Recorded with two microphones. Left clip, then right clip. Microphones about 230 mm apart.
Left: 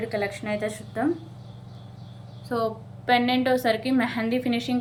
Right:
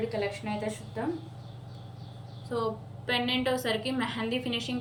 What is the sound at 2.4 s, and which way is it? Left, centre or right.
A woman's voice, centre.